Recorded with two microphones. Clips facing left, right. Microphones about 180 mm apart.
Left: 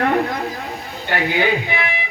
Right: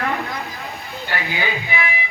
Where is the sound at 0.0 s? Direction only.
45° left (ahead or behind).